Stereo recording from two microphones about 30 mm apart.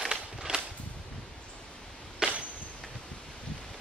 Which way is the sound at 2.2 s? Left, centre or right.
Right.